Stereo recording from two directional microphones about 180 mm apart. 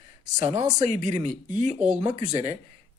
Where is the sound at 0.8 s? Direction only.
40° right (ahead or behind).